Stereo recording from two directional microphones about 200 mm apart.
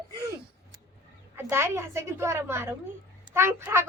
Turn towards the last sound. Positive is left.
turn(degrees=-10)  # may be behind; listen again after turning